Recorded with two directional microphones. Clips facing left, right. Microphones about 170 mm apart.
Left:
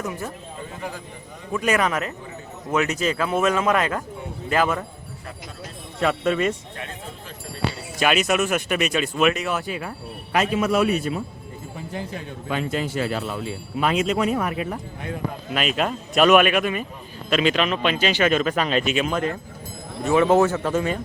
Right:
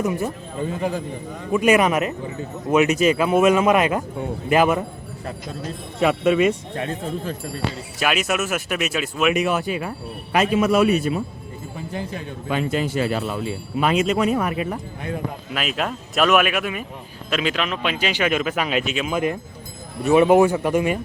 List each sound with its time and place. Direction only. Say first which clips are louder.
0.0 s speech: right 7 dB; 15° right (ahead or behind)
1.5 s speech: right 5 dB; 15° right (ahead or behind)
6.0 s speech: right 4 dB; 10° right (ahead or behind)
6.7 s speech: right 9 dB; 40° right (ahead or behind)
7.9 s speech: left 2 dB; 5° right (ahead or behind)
12.5 s speech: right 3 dB; 15° right (ahead or behind)
15.5 s speech: left 2 dB; centre (ahead or behind)
19.1 s speech: right 2 dB; 15° right (ahead or behind)